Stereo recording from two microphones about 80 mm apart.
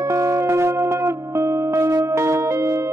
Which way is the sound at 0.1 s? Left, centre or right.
Right.